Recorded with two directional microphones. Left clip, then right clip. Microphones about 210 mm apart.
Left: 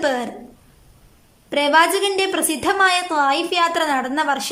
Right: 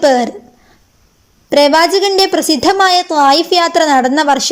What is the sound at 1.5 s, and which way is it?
A woman's voice, 25° right (ahead or behind).